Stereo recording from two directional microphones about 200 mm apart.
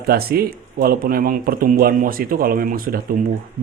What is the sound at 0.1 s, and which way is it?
Speech, 50° right (ahead or behind).